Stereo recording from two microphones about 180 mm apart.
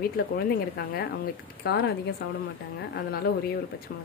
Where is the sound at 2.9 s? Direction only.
60° left (ahead or behind).